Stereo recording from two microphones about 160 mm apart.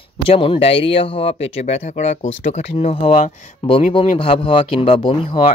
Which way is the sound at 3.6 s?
35° left (ahead or behind).